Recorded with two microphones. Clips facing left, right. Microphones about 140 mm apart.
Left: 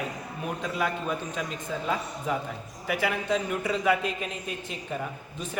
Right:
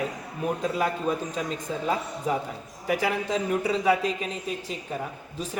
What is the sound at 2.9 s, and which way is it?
A man's voice, 35° right (ahead or behind).